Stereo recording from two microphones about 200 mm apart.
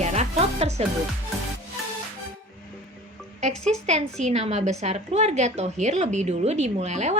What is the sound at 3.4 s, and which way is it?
A woman's voice, 35° right (ahead or behind).